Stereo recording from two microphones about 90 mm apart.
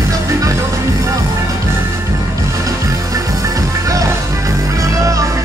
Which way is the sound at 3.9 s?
40° right (ahead or behind).